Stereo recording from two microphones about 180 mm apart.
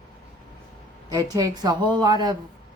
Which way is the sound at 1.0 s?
20° right (ahead or behind).